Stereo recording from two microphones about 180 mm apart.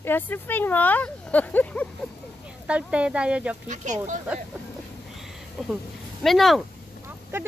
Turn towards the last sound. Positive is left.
turn(degrees=-15)  # may be behind; listen again after turning